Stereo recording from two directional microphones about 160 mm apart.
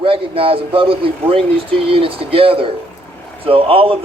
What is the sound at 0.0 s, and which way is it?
Speech, 35° right (ahead or behind).